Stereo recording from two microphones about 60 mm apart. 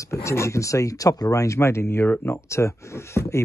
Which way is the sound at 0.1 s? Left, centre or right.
Left.